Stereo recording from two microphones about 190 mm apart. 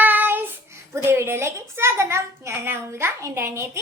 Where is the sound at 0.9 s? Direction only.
15° right (ahead or behind).